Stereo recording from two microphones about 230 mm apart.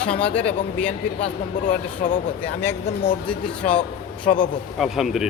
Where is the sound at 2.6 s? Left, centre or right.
Centre.